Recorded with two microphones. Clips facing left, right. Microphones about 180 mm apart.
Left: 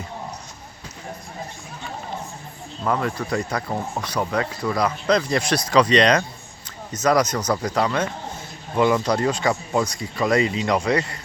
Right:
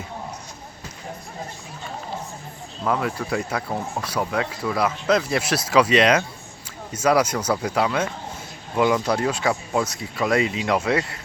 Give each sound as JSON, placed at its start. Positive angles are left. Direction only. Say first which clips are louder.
{"t": 2.8, "sound": "speech", "louder": "even", "side_deg": -5}